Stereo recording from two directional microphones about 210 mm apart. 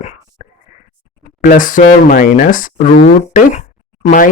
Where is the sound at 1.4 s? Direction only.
40° left (ahead or behind).